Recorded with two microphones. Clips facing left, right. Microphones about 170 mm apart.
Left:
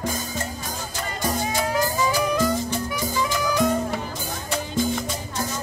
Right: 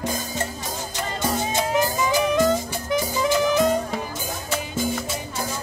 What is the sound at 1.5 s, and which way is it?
Music, 20° right (ahead or behind).